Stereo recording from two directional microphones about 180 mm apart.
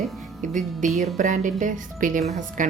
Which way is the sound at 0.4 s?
45° right (ahead or behind).